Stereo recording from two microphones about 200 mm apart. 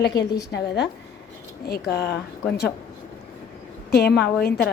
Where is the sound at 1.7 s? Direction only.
55° left (ahead or behind).